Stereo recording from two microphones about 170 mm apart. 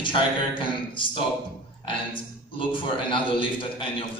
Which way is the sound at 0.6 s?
30° left (ahead or behind).